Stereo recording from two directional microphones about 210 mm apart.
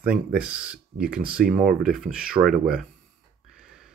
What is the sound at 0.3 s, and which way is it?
Speech, 5° right (ahead or behind).